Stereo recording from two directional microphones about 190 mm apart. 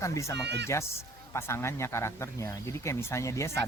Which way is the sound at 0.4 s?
65° right (ahead or behind).